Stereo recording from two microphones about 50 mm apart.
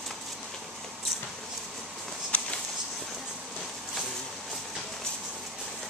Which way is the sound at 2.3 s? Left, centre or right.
Left.